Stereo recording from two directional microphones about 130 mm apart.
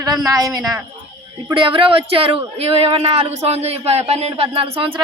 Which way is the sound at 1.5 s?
45° right (ahead or behind).